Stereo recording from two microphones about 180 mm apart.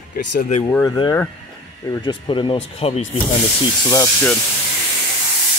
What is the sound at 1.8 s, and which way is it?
Speech, 25° left (ahead or behind).